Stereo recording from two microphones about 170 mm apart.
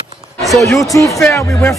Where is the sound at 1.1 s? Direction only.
20° left (ahead or behind).